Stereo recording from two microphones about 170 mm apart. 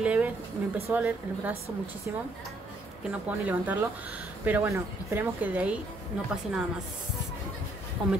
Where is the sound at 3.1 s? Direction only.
10° right (ahead or behind).